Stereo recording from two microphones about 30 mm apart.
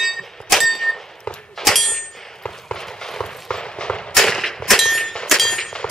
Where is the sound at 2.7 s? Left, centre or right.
Left.